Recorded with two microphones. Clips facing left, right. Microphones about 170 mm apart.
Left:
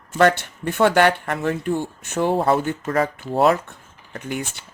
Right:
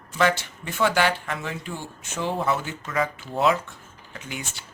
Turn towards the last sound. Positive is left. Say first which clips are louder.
# left 8 dB
turn(degrees=50)  # may be behind; listen again after turning